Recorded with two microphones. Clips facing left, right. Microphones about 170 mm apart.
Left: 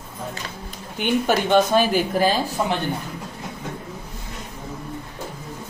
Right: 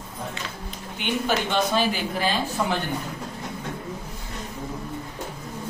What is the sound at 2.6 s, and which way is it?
Speech, 20° left (ahead or behind).